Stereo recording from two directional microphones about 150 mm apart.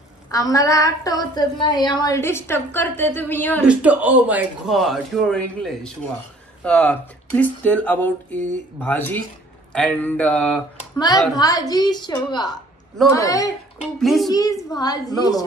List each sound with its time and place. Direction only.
0.3 s a woman's voice: 25° left (ahead or behind)
3.6 s a man's voice: 10° right (ahead or behind); by 10.6 s 5° left (ahead or behind)
11.0 s a woman's voice: 25° left (ahead or behind)
13.9 s a man's voice: centre (ahead or behind)
14.3 s a woman's voice: 25° left (ahead or behind)